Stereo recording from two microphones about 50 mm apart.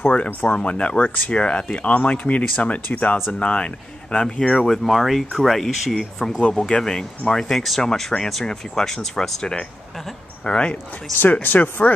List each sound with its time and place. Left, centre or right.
0.0 s speech: left
1.3 s speech: left
11.1 s speech: left